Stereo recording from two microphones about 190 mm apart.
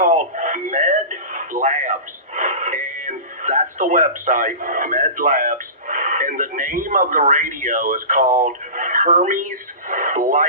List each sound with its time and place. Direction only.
0.0 s radio: 40° right (ahead or behind)